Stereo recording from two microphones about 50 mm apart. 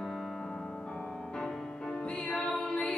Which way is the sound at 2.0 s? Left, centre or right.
Left.